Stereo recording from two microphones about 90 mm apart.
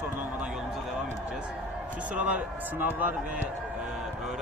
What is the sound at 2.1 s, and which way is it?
Speech, 15° right (ahead or behind).